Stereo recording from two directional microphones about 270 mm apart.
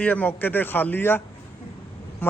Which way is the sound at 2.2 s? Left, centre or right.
Centre.